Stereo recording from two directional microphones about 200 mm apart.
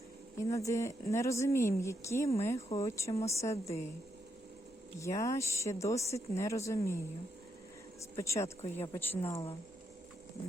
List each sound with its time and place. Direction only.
0.3 s speech: 15° left (ahead or behind)
4.9 s speech: 15° left (ahead or behind)
8.1 s speech: 15° left (ahead or behind)
9.2 s speech: 30° left (ahead or behind)